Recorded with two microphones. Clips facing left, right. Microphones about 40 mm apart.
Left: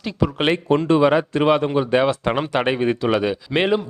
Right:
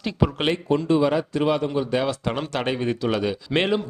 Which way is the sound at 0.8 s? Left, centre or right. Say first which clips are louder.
Left 5 dB; left.